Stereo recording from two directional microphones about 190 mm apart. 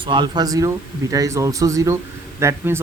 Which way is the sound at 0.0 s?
25° right (ahead or behind).